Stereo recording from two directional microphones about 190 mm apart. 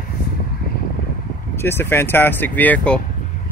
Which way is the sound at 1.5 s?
10° left (ahead or behind).